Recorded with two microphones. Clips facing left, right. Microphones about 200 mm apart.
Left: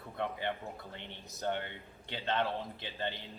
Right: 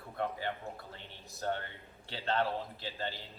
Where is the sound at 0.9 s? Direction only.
20° left (ahead or behind).